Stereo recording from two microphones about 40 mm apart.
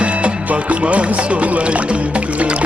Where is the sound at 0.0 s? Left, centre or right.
Right.